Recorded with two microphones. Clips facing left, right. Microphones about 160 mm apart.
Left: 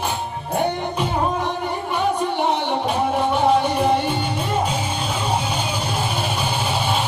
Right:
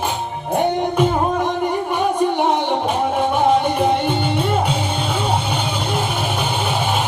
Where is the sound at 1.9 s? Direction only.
50° right (ahead or behind).